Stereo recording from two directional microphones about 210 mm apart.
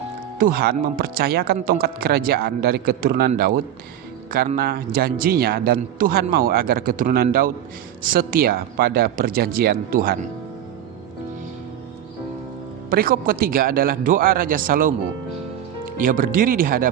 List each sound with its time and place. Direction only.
0.3 s a man's voice: 45° right (ahead or behind)
12.9 s a man's voice: 45° right (ahead or behind)
16.0 s a man's voice: 40° right (ahead or behind)